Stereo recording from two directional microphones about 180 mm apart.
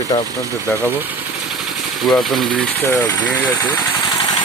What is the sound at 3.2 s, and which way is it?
Speech, 20° left (ahead or behind).